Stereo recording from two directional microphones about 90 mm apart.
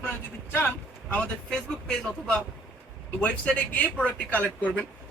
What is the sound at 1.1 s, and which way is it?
Speech, 10° left (ahead or behind).